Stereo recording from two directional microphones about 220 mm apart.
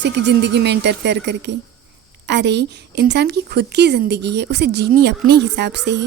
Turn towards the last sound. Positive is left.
turn(degrees=-50)  # may be behind; listen again after turning